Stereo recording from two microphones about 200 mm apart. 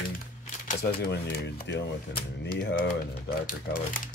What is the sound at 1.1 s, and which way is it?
Speech, 55° left (ahead or behind).